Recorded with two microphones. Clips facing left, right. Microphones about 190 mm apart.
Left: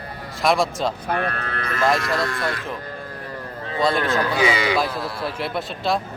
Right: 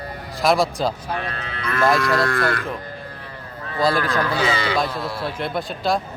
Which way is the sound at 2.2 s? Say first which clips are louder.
Right 4 dB; 60° right (ahead or behind).